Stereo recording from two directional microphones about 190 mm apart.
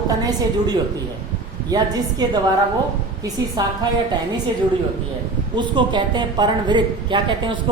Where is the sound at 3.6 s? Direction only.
20° right (ahead or behind).